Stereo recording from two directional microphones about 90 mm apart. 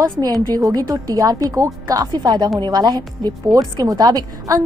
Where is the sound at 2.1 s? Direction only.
55° right (ahead or behind).